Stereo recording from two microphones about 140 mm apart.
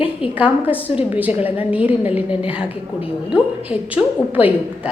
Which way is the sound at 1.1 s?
10° right (ahead or behind).